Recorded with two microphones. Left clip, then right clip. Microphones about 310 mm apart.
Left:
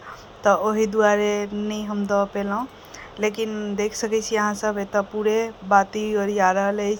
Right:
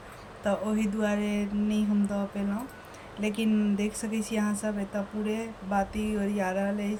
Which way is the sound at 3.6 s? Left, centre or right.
Left.